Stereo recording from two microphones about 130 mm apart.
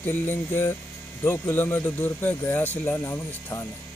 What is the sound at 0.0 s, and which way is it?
Speech, 15° left (ahead or behind).